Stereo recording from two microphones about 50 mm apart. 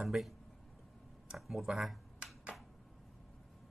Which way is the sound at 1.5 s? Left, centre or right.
Centre.